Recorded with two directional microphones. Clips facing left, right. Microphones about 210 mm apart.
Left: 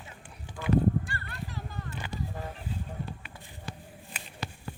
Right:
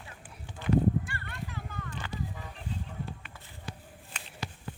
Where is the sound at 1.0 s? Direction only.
35° left (ahead or behind).